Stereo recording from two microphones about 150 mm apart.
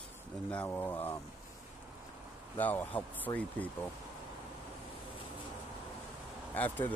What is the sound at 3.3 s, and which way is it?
Speech, 25° left (ahead or behind).